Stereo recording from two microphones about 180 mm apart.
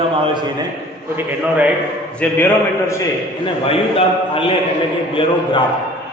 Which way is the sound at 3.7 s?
30° left (ahead or behind).